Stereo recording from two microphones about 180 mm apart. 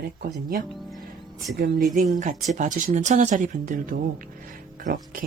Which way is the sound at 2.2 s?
40° right (ahead or behind).